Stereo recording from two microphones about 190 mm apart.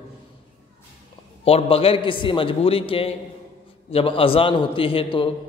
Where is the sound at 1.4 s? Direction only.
30° left (ahead or behind).